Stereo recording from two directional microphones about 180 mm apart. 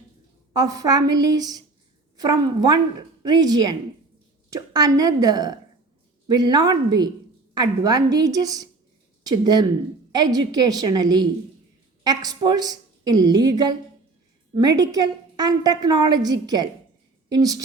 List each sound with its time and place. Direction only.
0.5 s a woman's voice: 20° right (ahead or behind)